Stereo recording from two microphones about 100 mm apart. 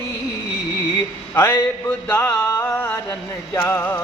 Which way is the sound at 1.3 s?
25° left (ahead or behind).